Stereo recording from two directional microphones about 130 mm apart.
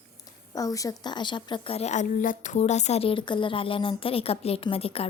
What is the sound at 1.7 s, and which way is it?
Speech, 60° left (ahead or behind).